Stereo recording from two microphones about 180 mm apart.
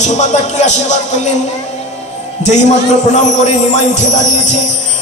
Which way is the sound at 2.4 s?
40° left (ahead or behind).